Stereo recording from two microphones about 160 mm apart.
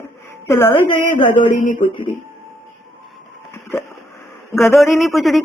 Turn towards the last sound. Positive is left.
turn(degrees=0)  # may be behind; listen again after turning